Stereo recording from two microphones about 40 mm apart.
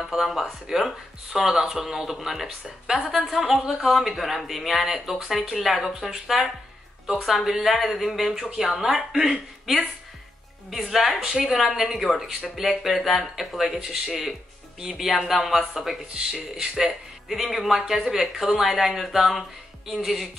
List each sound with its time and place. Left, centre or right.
0.0 s speech: centre
10.7 s speech: centre
16.1 s speech: centre
17.3 s speech: centre